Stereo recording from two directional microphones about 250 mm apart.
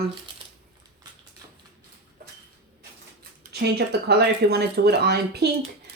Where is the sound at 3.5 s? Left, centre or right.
Right.